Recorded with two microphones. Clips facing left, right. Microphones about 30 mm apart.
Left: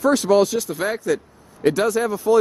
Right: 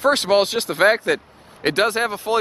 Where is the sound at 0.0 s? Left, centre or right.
Right.